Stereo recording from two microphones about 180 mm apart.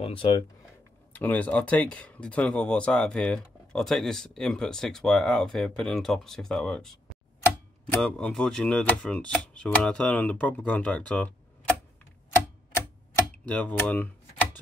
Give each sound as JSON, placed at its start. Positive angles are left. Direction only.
{"t": 0.0, "sound": "speech", "side_deg": 30}
{"t": 1.1, "sound": "speech", "side_deg": 10}
{"t": 8.0, "sound": "speech", "side_deg": 5}
{"t": 13.5, "sound": "speech", "side_deg": 10}